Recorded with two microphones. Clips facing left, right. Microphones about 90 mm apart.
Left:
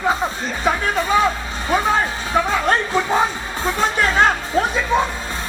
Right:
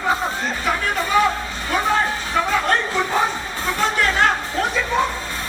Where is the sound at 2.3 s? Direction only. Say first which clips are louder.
Left 3 dB; 20° left (ahead or behind).